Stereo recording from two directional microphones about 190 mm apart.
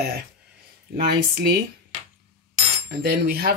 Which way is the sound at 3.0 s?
55° right (ahead or behind).